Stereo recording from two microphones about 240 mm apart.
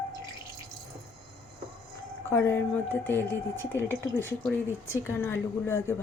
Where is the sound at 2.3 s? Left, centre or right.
Centre.